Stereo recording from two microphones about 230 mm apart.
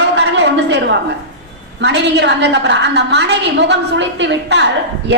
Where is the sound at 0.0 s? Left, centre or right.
Right.